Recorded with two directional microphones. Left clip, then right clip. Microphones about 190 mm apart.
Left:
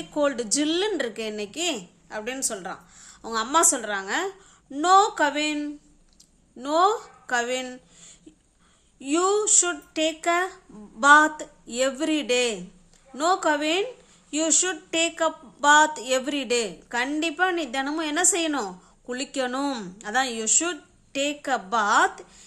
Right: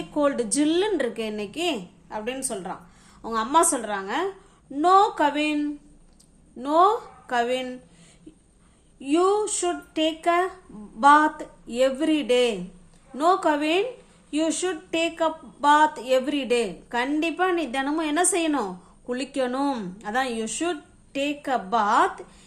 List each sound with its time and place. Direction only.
0.1 s a woman's voice: 20° left (ahead or behind)
9.0 s a woman's voice: 30° left (ahead or behind)